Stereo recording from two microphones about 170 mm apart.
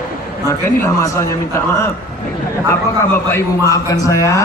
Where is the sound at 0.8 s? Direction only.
15° left (ahead or behind).